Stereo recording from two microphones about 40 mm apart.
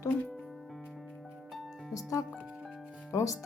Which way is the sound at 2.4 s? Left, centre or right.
Centre.